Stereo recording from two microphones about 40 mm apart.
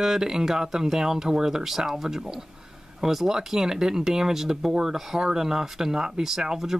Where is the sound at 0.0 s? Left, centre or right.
Centre.